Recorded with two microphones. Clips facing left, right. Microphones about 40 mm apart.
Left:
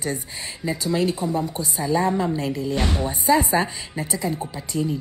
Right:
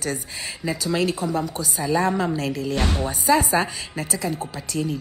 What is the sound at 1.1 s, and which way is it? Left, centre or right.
Speech, right.